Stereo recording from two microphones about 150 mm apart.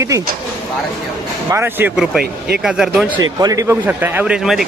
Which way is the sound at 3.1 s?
25° right (ahead or behind).